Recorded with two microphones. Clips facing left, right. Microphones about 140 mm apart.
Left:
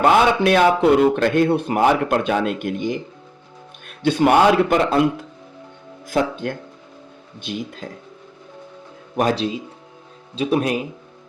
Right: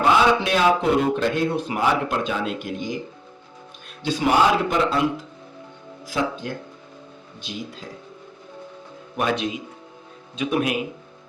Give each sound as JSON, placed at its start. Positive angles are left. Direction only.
{"t": 0.0, "sound": "a man's voice", "side_deg": 55}
{"t": 9.1, "sound": "speech", "side_deg": 35}